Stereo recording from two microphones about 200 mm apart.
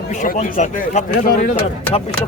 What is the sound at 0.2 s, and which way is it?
Speech, 40° left (ahead or behind).